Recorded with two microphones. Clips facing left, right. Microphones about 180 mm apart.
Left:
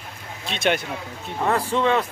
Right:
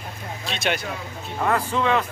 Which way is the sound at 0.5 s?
55° left (ahead or behind).